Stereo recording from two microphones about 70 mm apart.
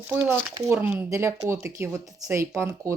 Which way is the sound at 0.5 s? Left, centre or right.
Right.